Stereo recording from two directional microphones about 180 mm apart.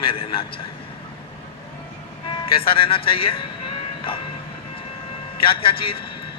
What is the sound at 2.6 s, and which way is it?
Speech, 30° left (ahead or behind).